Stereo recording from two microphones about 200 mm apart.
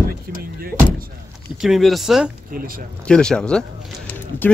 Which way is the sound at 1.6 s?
Centre (ahead or behind).